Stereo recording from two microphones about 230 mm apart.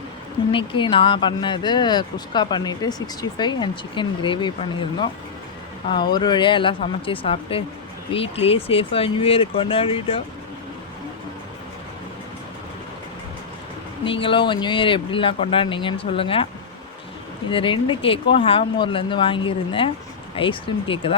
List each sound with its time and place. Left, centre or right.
0.5 s speech: left
14.0 s speech: left
17.5 s speech: left